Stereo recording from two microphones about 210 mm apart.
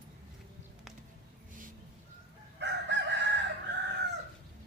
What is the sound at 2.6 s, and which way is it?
Chicken, 55° right (ahead or behind).